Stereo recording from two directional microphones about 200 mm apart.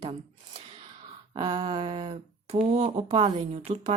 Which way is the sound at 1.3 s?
25° right (ahead or behind).